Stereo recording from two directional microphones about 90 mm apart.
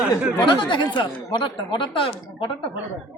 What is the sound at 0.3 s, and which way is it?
Speech, 60° left (ahead or behind).